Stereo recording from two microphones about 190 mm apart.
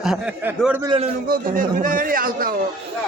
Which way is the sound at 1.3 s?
45° right (ahead or behind).